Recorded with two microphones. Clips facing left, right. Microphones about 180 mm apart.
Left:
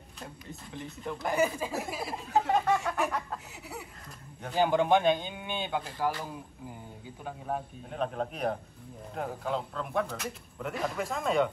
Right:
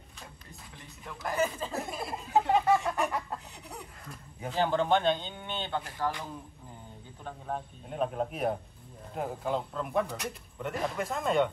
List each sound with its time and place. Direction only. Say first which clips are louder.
1.2 s speech: left 2 dB; 15° left (ahead or behind)
1.7 s chicken: left 1 dB; centre (ahead or behind)
4.6 s speech: left 2 dB; 15° left (ahead or behind)
7.9 s chicken: right 1 dB; 5° right (ahead or behind)